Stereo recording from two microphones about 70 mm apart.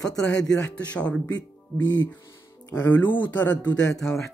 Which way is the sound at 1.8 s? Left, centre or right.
Left.